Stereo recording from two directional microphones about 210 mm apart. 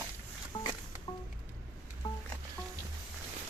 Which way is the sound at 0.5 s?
25° left (ahead or behind).